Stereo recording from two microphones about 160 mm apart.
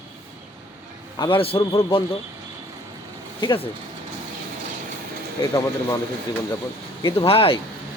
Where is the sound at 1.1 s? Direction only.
30° left (ahead or behind).